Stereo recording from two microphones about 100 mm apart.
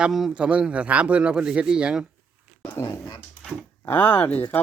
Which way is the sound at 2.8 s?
25° left (ahead or behind).